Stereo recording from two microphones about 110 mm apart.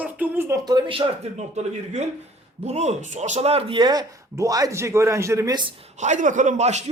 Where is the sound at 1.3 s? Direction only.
90° right.